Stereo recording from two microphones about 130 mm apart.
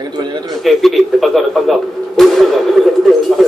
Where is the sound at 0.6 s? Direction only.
Centre (ahead or behind).